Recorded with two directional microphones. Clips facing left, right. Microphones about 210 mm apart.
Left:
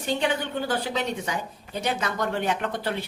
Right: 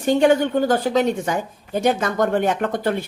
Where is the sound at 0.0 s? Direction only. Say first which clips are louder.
Right 10 dB; 45° right (ahead or behind).